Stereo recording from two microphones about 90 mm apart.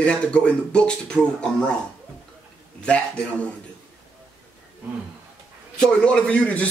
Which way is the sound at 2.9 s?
15° left (ahead or behind).